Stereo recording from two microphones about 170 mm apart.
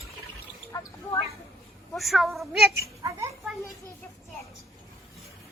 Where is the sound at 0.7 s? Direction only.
20° left (ahead or behind).